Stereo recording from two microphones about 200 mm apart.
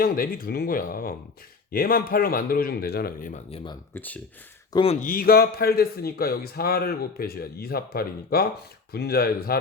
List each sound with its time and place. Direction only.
0.0 s a man's voice: 45° left (ahead or behind)
3.5 s speech: 25° left (ahead or behind)
3.9 s speech: 10° left (ahead or behind)
4.7 s speech: 25° left (ahead or behind)
5.0 s a man's voice: 45° left (ahead or behind)